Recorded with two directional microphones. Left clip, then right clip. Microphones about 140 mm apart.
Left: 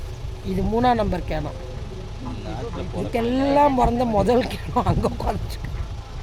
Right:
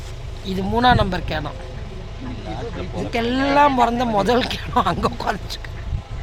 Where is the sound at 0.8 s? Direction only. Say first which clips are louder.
Right 4 dB; 15° left (ahead or behind).